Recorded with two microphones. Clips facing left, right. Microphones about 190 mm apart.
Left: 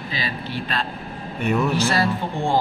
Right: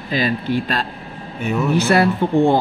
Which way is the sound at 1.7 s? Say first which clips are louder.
Right 6 dB; 60° right (ahead or behind).